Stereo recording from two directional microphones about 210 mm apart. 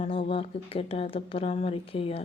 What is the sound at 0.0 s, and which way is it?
Speech, 25° left (ahead or behind).